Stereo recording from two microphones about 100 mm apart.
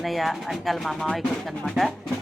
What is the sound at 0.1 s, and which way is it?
Speech, centre (ahead or behind).